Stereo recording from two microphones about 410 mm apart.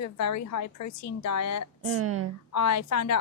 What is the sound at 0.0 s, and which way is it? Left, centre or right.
A woman's voice, left.